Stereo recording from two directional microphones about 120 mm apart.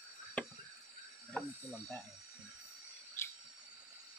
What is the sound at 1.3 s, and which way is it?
Speech, centre (ahead or behind).